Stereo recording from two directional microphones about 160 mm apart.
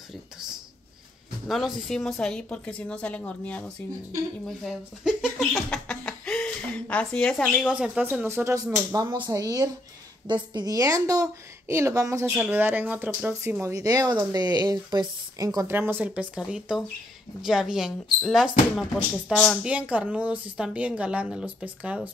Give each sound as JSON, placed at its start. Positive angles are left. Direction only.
{"t": 1.5, "sound": "a woman's voice", "side_deg": 0}
{"t": 5.4, "sound": "a sound", "side_deg": 5}
{"t": 7.7, "sound": "a woman's voice", "side_deg": -5}